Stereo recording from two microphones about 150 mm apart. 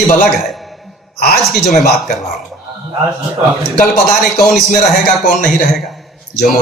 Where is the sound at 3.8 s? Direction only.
60° left (ahead or behind).